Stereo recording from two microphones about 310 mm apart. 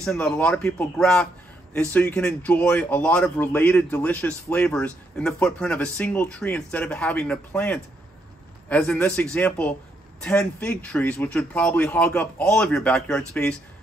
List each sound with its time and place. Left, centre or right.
0.0 s speech: centre